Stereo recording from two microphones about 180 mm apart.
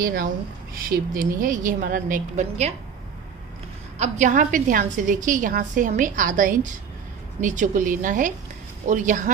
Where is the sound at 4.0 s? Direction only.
40° right (ahead or behind).